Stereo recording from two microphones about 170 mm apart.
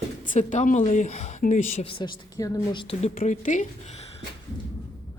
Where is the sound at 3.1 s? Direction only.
50° left (ahead or behind).